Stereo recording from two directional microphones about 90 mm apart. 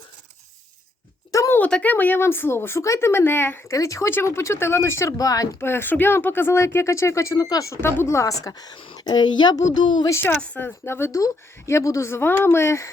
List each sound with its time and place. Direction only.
1.3 s a sound: 35° left (ahead or behind)
1.5 s speech: 15° left (ahead or behind)
3.8 s speech: 35° left (ahead or behind)
5.5 s speech: 25° left (ahead or behind)
7.8 s a woman's voice: 25° left (ahead or behind); by 10.1 s 55° left (ahead or behind)
10.1 s speech: 25° left (ahead or behind)
10.3 s speech: 15° left (ahead or behind)
10.8 s speech: 25° left (ahead or behind)